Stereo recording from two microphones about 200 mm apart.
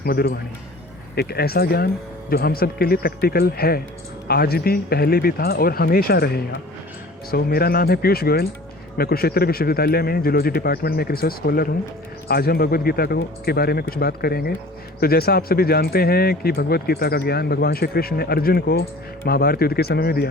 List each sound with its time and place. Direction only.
0.0 s speech: 50° left (ahead or behind)